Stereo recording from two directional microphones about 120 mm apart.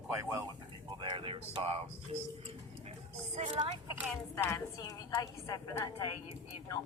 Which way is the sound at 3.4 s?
65° right (ahead or behind).